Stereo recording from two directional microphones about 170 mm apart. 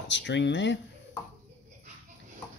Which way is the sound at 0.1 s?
90° left.